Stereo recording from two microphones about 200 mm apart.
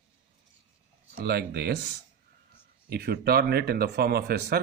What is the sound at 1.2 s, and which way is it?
Speech, 50° right (ahead or behind).